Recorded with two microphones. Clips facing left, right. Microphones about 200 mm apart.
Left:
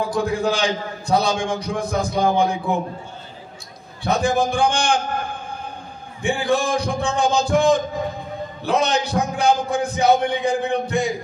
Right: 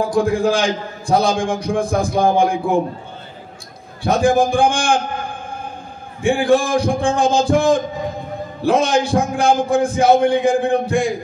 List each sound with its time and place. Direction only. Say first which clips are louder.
0.1 s a man's voice: right 5 dB; 50° right (ahead or behind)
4.0 s a man's voice: right 5 dB; 50° right (ahead or behind)
6.2 s a man's voice: right 5 dB; 55° right (ahead or behind)